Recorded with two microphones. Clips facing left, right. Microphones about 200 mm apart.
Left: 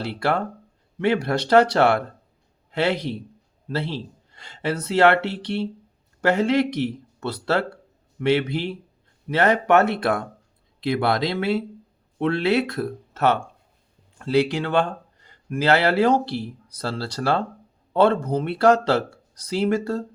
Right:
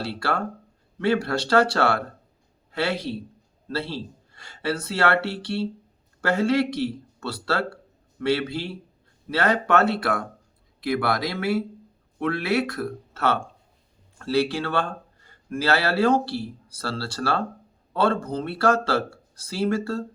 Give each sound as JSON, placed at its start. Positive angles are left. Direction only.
{"t": 0.0, "sound": "speech", "side_deg": 20}